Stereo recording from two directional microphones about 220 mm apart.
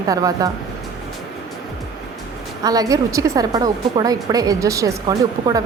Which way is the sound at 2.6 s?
15° right (ahead or behind).